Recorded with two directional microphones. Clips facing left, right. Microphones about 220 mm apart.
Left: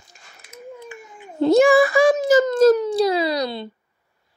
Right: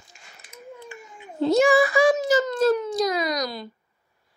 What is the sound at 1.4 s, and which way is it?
A child's voice, 55° left (ahead or behind).